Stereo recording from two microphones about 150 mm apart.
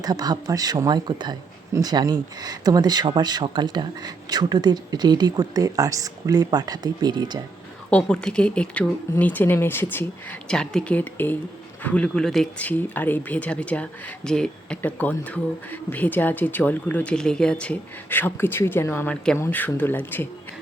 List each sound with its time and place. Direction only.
0.0 s speech: 25° right (ahead or behind)
7.9 s speech: 5° left (ahead or behind)